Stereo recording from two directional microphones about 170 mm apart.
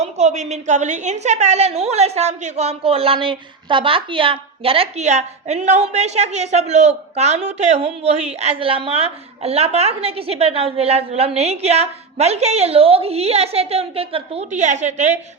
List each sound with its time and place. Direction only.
0.0 s a woman's voice: 40° right (ahead or behind)